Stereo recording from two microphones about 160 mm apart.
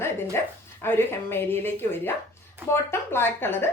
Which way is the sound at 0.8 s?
15° left (ahead or behind).